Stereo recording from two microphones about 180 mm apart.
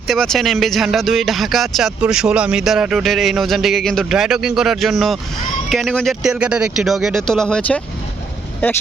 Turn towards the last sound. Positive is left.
turn(degrees=5)  # may be behind; listen again after turning